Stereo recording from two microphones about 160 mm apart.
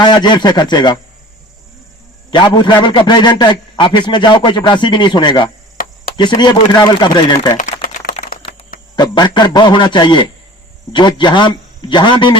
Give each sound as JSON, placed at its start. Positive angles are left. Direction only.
{"t": 0.0, "sound": "a man's voice", "side_deg": 30}
{"t": 2.3, "sound": "a man's voice", "side_deg": 30}
{"t": 7.5, "sound": "typing", "side_deg": 55}
{"t": 8.2, "sound": "a sound", "side_deg": 35}
{"t": 9.0, "sound": "a man's voice", "side_deg": 25}